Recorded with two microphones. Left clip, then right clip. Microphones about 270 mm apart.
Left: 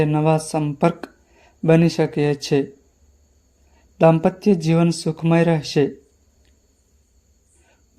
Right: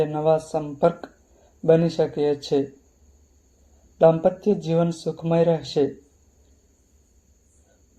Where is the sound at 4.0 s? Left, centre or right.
Left.